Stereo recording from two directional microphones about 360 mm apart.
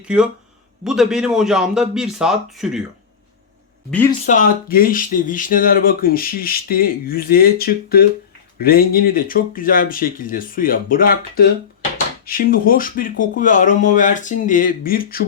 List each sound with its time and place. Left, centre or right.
0.0 s a man's voice: centre
4.3 s speech: left